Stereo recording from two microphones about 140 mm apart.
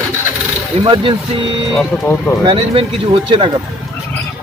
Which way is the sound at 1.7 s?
Centre (ahead or behind).